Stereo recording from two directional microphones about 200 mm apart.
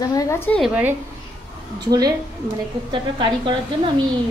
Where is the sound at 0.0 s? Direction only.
20° left (ahead or behind).